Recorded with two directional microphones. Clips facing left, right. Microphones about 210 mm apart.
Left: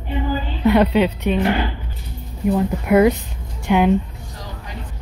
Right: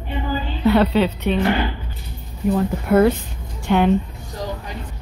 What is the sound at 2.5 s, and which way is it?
Speech, 15° left (ahead or behind).